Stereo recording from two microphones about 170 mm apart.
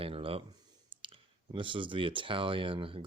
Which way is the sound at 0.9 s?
30° right (ahead or behind).